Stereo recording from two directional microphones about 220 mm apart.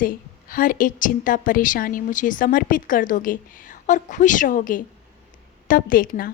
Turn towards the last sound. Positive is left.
turn(degrees=40)  # may be behind; listen again after turning